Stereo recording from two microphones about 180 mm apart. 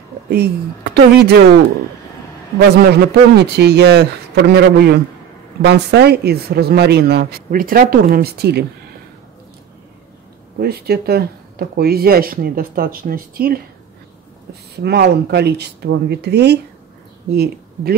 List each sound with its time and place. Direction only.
0.3 s speech: 60° right (ahead or behind)
2.7 s speech: 65° right (ahead or behind)
10.6 s speech: 60° right (ahead or behind)
14.8 s speech: 65° right (ahead or behind)